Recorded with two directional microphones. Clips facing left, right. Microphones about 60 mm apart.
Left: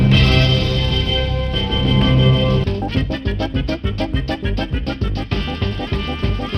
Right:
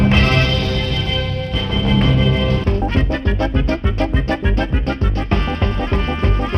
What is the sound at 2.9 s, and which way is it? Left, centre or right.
Music, right.